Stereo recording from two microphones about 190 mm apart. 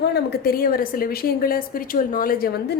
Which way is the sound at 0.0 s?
60° left (ahead or behind).